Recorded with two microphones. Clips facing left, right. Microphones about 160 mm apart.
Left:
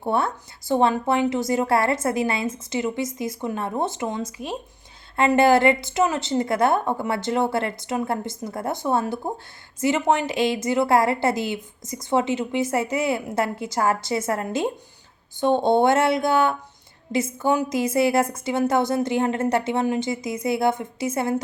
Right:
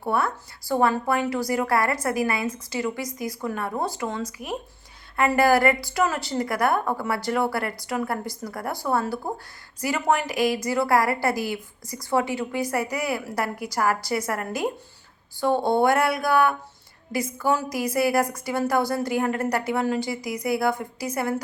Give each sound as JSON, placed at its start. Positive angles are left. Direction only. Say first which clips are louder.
{"t": 0.0, "sound": "a woman's voice", "louder": "left 2 dB", "side_deg": 25}